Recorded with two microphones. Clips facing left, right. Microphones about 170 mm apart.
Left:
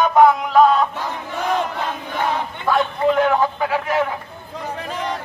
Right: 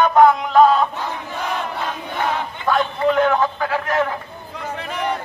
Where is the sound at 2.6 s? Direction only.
5° left (ahead or behind).